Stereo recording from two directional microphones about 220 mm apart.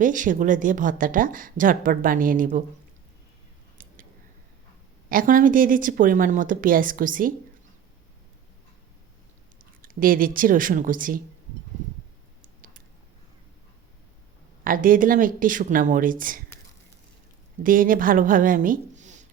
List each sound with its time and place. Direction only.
0.0 s speech: 35° right (ahead or behind)
3.8 s a sound: 40° right (ahead or behind)
5.0 s speech: 40° right (ahead or behind)
9.6 s speech: 40° right (ahead or behind)
14.6 s speech: 40° right (ahead or behind)
17.6 s speech: 40° right (ahead or behind)